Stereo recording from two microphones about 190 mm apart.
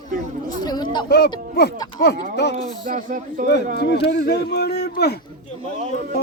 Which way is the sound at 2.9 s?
45° right (ahead or behind).